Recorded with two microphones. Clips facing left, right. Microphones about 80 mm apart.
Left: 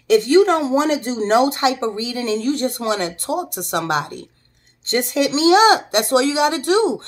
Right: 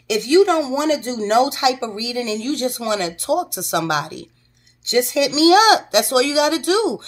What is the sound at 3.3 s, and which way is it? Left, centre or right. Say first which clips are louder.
Speech: right 4 dB; centre.